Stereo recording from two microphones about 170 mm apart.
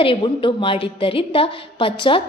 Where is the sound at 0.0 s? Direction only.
30° left (ahead or behind).